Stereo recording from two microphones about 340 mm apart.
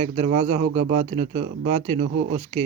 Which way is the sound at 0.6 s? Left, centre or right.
Right.